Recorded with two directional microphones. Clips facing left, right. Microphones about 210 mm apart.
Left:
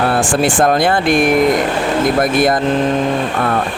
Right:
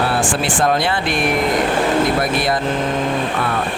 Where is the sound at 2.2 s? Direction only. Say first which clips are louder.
Left 5 dB; 50° left (ahead or behind).